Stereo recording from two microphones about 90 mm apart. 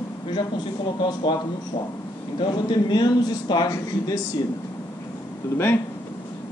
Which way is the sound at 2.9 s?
55° left (ahead or behind).